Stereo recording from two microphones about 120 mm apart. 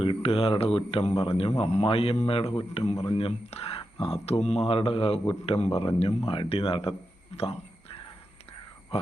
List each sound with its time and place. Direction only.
0.0 s speech: 50° left (ahead or behind); by 4.6 s 65° left (ahead or behind)
4.7 s speech: 50° left (ahead or behind)
7.3 s whispering: 55° left (ahead or behind)
8.9 s speech: 55° left (ahead or behind)